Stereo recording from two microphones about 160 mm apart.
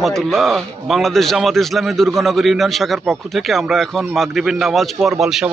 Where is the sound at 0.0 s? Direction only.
Centre (ahead or behind).